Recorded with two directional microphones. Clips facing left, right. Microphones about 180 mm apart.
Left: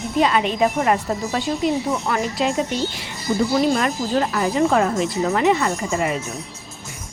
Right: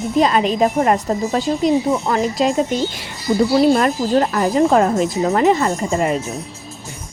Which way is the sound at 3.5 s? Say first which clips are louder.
Right 6 dB; 40° right (ahead or behind).